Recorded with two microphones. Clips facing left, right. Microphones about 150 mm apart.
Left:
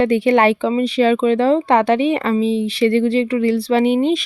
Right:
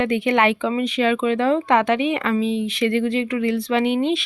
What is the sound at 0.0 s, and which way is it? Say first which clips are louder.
A woman's voice: left 5 dB; 35° left (ahead or behind).